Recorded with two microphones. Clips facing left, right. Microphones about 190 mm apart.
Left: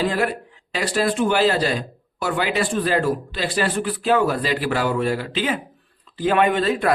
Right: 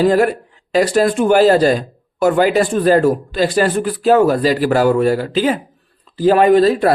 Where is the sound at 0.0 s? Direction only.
45° right (ahead or behind).